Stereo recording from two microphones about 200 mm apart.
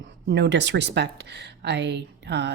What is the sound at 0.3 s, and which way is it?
A woman's voice, 60° right (ahead or behind).